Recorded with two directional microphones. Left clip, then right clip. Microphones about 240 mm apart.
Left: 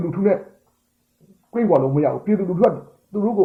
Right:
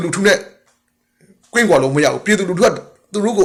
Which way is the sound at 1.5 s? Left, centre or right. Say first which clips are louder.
Right 5 dB; centre.